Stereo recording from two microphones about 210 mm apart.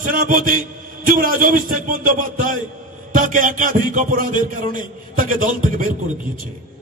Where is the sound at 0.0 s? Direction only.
40° right (ahead or behind).